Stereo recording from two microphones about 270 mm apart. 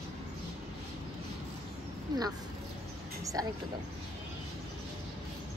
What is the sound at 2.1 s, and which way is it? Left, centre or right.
Speech, centre.